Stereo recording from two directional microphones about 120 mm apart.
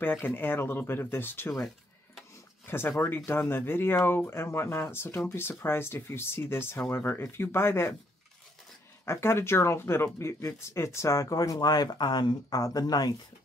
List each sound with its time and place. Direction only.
0.0 s speech: 15° left (ahead or behind)
2.6 s speech: 20° left (ahead or behind)
9.0 s speech: 20° left (ahead or behind)